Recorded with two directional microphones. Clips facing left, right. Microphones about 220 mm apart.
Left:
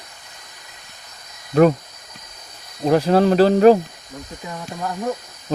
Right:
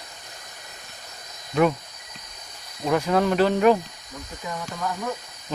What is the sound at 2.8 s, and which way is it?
Speech, 35° left (ahead or behind).